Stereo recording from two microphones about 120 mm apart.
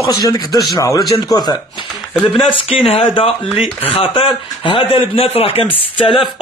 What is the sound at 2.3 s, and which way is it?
A man's voice, 55° left (ahead or behind).